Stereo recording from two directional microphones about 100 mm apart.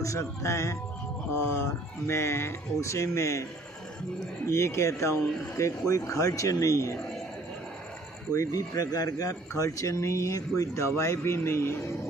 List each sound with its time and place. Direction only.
0.0 s speech: 30° left (ahead or behind)
2.0 s speech: 25° left (ahead or behind)
4.4 s speech: 30° left (ahead or behind)
8.3 s speech: 35° left (ahead or behind)